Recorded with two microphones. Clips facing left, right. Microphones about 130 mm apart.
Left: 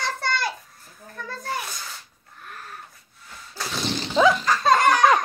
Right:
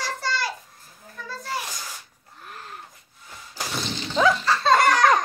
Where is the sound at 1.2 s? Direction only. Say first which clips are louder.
Left 2 dB; 50° left (ahead or behind).